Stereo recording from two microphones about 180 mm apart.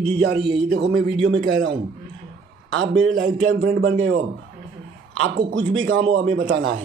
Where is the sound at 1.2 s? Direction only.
90° right.